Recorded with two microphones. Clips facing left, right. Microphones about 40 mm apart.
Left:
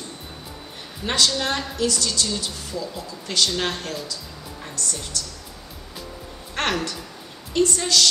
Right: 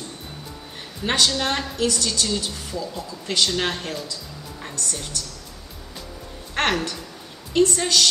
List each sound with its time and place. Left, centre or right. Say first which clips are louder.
1.0 s speech: right 1 dB; right
1.4 s a woman's voice: right 1 dB; centre
1.8 s speech: even; right
2.0 s a woman's voice: right 1 dB; centre
2.8 s a woman's voice: right 1 dB; right
6.5 s a woman's voice: right 2 dB; right